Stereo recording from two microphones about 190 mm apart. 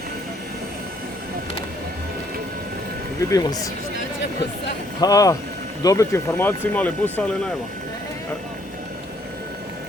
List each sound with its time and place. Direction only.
3.2 s speech: 15° left (ahead or behind)
4.9 s speech: 20° left (ahead or behind)